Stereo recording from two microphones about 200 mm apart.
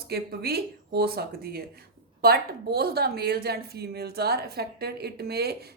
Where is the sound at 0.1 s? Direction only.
50° right (ahead or behind).